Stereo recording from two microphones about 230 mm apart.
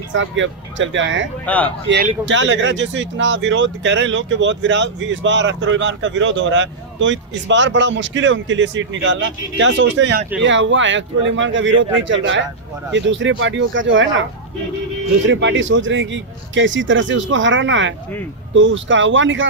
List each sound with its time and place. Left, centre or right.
0.1 s speech: right
1.5 s speech: centre
2.2 s speech: right
15.3 s speech: right